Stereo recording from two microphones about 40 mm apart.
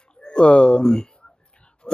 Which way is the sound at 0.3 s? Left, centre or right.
Left.